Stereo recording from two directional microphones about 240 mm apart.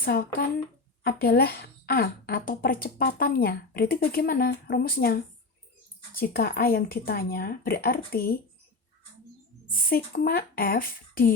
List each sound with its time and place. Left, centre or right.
0.0 s speech: left
9.9 s speech: left